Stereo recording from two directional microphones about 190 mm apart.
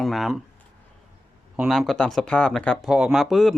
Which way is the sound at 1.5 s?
Centre (ahead or behind).